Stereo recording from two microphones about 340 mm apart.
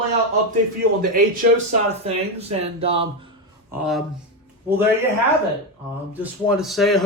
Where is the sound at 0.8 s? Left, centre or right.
Right.